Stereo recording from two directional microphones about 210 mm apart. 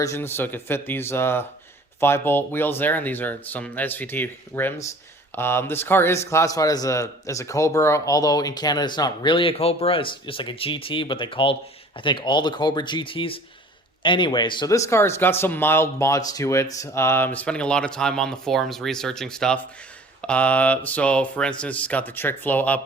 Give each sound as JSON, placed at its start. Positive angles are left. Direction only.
{"t": 0.0, "sound": "a man's voice", "side_deg": 10}